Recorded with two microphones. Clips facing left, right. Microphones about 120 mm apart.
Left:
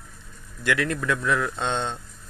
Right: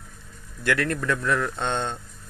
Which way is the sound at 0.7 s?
50° right (ahead or behind).